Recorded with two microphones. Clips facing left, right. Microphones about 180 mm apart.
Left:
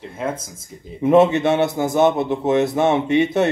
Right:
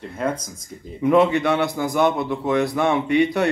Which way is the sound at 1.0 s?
25° left (ahead or behind).